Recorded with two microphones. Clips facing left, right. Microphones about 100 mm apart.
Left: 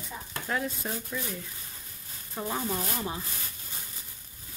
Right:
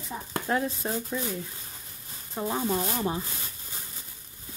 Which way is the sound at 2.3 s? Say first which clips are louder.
Right 3 dB; 15° right (ahead or behind).